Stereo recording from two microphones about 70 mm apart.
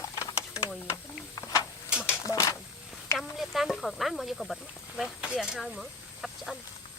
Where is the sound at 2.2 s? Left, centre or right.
Left.